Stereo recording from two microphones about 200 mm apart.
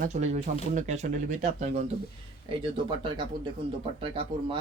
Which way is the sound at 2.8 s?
25° right (ahead or behind).